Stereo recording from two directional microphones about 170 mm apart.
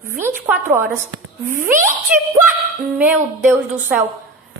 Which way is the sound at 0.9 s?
55° right (ahead or behind).